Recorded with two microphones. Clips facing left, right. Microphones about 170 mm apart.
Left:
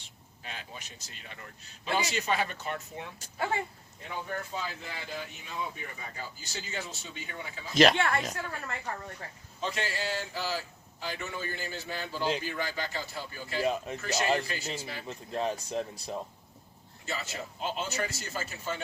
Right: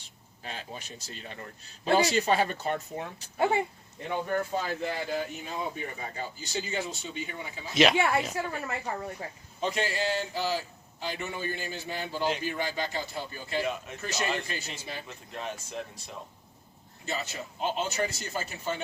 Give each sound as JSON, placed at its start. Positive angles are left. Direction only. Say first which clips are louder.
{"t": 0.4, "sound": "a man's voice", "louder": "right 4 dB", "side_deg": -35}
{"t": 3.3, "sound": "a man's voice", "louder": "right 6 dB", "side_deg": -20}
{"t": 4.4, "sound": "speech", "louder": "right 7 dB", "side_deg": -50}
{"t": 6.4, "sound": "a man's voice", "louder": "right 7 dB", "side_deg": -20}
{"t": 7.7, "sound": "a woman's voice", "louder": "even", "side_deg": 0}
{"t": 13.6, "sound": "speech", "louder": "left 2 dB", "side_deg": 35}
{"t": 15.0, "sound": "speech", "louder": "left 6 dB", "side_deg": 35}
{"t": 17.1, "sound": "a man's voice", "louder": "right 2 dB", "side_deg": -20}